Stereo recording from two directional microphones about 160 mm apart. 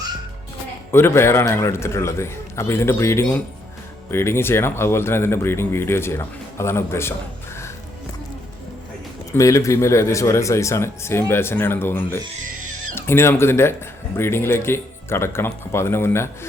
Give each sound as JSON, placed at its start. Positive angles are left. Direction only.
{"t": 0.9, "sound": "speech", "side_deg": 15}
{"t": 9.3, "sound": "speech", "side_deg": 20}